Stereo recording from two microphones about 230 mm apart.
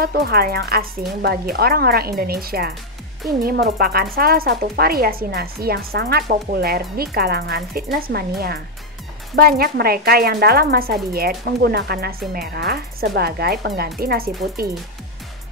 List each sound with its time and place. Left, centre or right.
0.0 s speech: right